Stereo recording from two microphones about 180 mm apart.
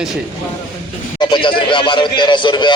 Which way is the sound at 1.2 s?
25° left (ahead or behind).